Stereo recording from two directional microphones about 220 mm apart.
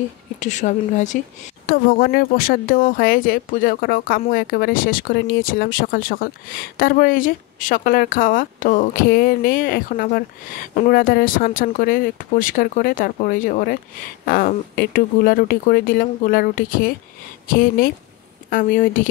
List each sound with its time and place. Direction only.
0.4 s speech: 35° left (ahead or behind)